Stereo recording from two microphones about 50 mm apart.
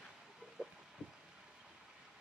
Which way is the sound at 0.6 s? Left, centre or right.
Centre.